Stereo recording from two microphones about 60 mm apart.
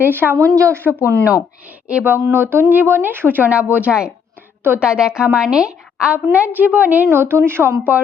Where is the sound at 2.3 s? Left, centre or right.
Right.